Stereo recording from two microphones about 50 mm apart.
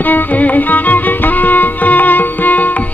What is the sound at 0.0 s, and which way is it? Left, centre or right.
Music, left.